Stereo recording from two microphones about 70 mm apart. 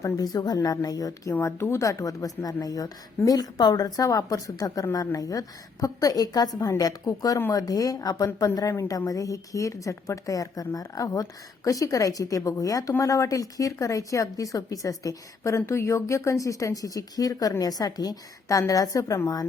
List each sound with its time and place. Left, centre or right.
0.2 s a woman's voice: left
1.4 s a woman's voice: left
2.0 s a woman's voice: left